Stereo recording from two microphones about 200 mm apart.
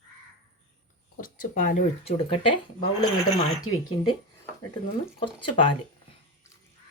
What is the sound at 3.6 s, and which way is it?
Speech, 90° left.